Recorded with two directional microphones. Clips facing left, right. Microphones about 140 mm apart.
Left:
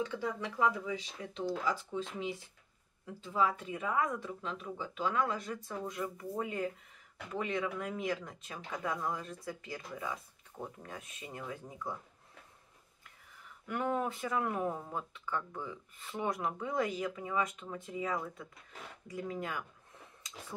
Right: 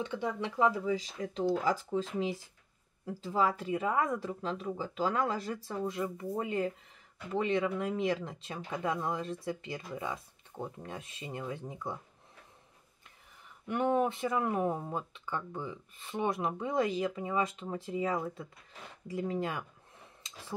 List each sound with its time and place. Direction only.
0.0 s speech: 25° right (ahead or behind)
13.7 s speech: 25° right (ahead or behind)
20.2 s a sound: 25° right (ahead or behind)